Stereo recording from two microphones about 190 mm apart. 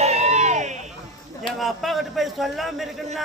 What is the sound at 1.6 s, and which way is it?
Speech, centre (ahead or behind).